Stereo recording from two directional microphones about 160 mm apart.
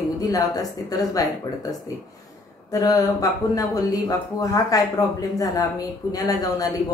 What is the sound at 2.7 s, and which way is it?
Mantra, 20° left (ahead or behind).